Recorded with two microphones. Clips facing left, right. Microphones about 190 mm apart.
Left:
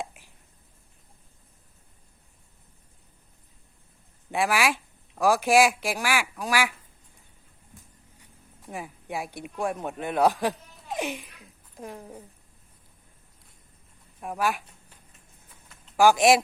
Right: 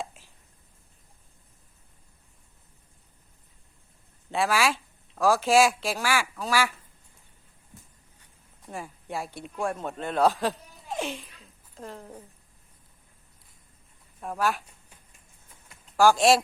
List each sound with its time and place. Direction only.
0.0 s a sound: 15° left (ahead or behind)
4.3 s speech: 15° left (ahead or behind)
8.7 s a woman's voice: 15° left (ahead or behind)
14.2 s speech: 10° left (ahead or behind)
16.0 s a woman's voice: 15° left (ahead or behind)